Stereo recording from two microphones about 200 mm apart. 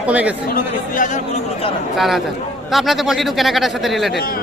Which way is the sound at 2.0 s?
Centre (ahead or behind).